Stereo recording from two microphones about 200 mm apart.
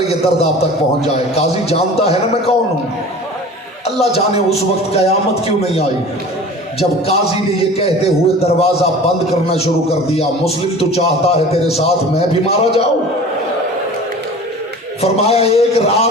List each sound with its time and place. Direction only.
0.1 s a man's voice: 30° left (ahead or behind)
4.1 s a man's voice: 30° left (ahead or behind)
15.0 s a man's voice: 30° left (ahead or behind)